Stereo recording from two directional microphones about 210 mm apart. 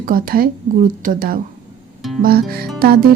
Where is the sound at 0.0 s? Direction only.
45° right (ahead or behind).